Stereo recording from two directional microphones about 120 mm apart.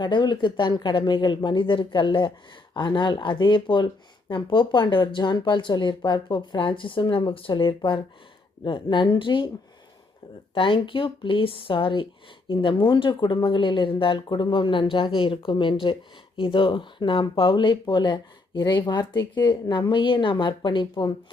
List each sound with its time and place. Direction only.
0.0 s speech: 40° left (ahead or behind)
10.5 s speech: 45° left (ahead or behind)